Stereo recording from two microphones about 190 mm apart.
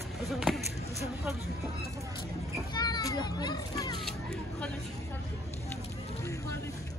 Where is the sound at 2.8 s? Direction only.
20° left (ahead or behind).